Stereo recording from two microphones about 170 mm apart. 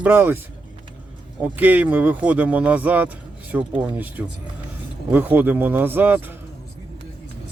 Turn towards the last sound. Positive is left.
turn(degrees=-10)  # may be behind; listen again after turning